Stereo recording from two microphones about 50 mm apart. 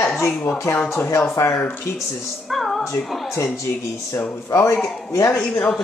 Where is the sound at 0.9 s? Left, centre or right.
Left.